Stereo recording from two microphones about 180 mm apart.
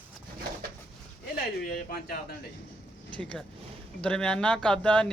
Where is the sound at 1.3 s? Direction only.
55° left (ahead or behind).